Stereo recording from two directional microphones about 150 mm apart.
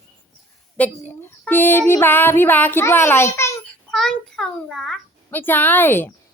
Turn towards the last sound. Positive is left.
turn(degrees=15)  # may be behind; listen again after turning